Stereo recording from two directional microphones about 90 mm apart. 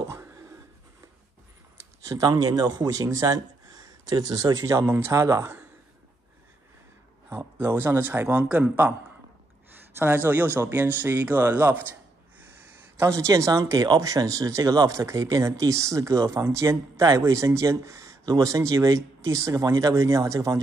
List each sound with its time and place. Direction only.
1.8 s speech: 40° right (ahead or behind)
7.3 s speech: 25° right (ahead or behind)
12.4 s a sound: 25° right (ahead or behind)
13.0 s speech: 35° right (ahead or behind)